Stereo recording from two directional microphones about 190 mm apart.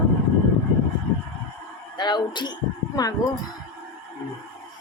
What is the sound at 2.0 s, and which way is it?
Speech, 25° left (ahead or behind).